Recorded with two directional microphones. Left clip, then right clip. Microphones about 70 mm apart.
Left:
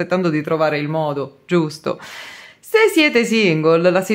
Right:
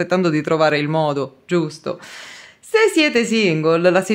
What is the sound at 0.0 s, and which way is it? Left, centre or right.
Speech, centre.